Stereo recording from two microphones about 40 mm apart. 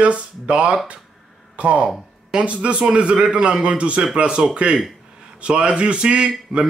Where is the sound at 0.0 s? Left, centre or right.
Right.